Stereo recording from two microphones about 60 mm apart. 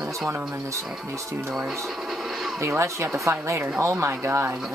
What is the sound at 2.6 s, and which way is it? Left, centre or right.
Speech, right.